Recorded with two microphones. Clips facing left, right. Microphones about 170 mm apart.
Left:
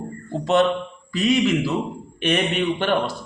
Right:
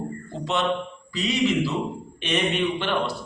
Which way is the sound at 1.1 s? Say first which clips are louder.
Left 4 dB; 50° left (ahead or behind).